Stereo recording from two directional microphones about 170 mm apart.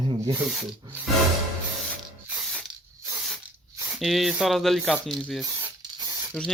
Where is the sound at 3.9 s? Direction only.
Centre (ahead or behind).